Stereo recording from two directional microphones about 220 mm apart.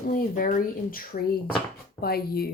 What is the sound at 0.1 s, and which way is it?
Speech, 40° left (ahead or behind).